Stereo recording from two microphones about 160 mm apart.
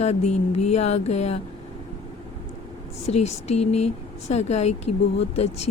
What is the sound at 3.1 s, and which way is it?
Speech, 45° left (ahead or behind).